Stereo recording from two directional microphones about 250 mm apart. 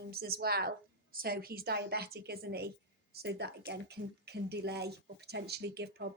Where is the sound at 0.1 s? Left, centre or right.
Right.